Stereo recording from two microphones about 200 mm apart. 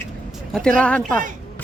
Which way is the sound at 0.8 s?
5° left (ahead or behind).